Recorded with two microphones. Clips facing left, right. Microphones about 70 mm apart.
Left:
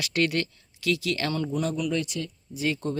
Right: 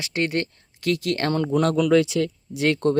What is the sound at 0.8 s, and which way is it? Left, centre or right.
Speech, right.